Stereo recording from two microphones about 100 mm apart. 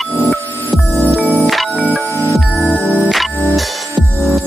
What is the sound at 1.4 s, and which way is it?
Music, centre (ahead or behind).